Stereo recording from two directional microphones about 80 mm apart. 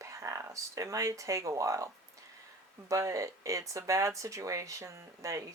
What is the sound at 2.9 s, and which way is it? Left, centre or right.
Speech, right.